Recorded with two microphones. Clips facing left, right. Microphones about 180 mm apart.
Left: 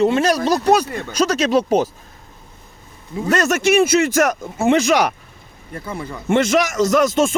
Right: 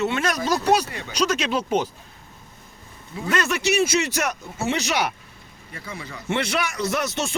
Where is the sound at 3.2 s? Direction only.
45° left (ahead or behind).